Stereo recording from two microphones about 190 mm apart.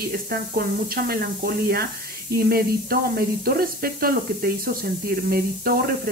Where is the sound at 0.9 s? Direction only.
55° right (ahead or behind).